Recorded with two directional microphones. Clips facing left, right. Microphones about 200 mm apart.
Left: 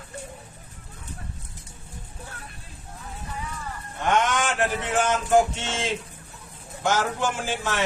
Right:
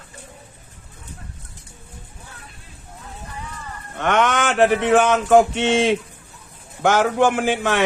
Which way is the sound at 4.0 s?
70° right (ahead or behind).